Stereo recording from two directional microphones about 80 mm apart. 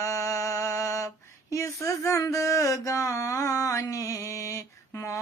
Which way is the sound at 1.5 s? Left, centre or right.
Left.